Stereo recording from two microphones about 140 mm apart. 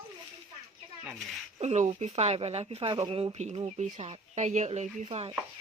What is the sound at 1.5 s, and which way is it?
Speech, 50° right (ahead or behind).